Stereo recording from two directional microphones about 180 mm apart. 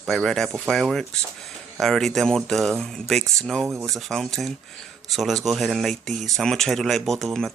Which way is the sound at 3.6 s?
15° right (ahead or behind).